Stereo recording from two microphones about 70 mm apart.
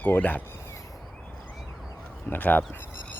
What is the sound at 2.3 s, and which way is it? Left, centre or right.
Speech, left.